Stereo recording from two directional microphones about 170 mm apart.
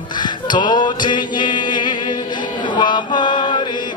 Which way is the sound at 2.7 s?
25° left (ahead or behind).